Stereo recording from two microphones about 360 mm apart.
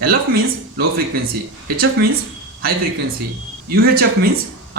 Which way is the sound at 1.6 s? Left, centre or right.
Right.